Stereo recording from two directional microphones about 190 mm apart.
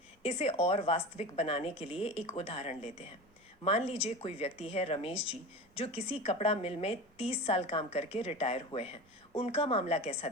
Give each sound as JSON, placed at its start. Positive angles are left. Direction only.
{"t": 0.2, "sound": "speech", "side_deg": 30}